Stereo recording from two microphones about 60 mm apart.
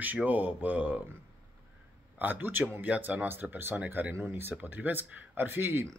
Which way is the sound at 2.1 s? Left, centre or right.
Right.